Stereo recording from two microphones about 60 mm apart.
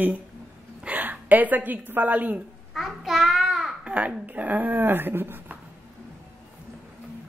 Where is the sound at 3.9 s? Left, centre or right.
Right.